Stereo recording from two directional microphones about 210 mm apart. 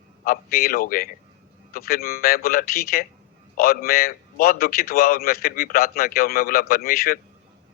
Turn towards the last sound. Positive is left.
turn(degrees=45)  # may be behind; listen again after turning